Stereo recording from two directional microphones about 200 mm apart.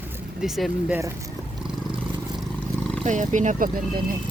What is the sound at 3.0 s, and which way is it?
Speech, 40° right (ahead or behind).